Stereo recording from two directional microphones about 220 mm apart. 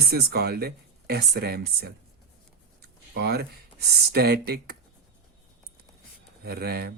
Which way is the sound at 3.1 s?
45° right (ahead or behind).